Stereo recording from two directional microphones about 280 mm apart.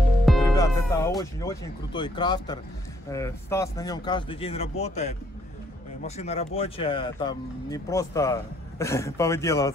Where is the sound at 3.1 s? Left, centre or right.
Centre.